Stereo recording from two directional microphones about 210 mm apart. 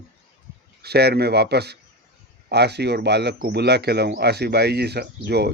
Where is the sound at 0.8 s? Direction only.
50° right (ahead or behind).